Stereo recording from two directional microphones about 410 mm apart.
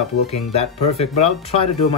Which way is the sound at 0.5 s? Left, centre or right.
Centre.